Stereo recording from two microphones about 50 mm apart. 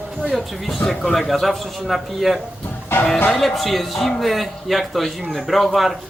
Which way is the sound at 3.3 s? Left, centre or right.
Centre.